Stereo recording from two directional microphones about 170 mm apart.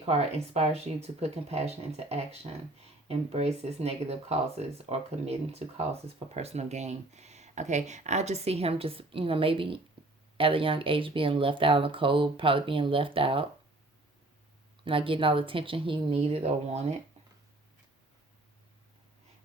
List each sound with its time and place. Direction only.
0.0 s speech: 40° right (ahead or behind)
14.8 s speech: 30° right (ahead or behind)